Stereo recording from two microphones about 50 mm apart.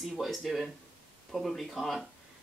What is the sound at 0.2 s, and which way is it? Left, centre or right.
Speech, centre.